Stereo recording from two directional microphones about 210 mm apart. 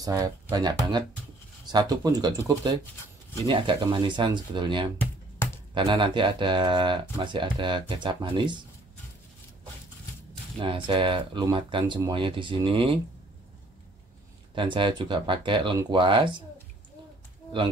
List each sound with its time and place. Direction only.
0.0 s speech: 20° right (ahead or behind)
10.6 s speech: 25° right (ahead or behind)
14.5 s speech: 25° right (ahead or behind)